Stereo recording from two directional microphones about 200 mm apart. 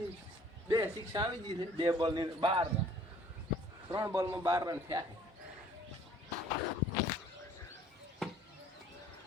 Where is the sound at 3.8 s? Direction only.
20° right (ahead or behind).